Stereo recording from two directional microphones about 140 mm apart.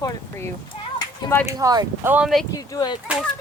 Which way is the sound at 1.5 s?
25° right (ahead or behind).